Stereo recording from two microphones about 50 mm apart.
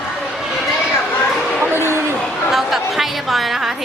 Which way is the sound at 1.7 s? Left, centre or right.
Right.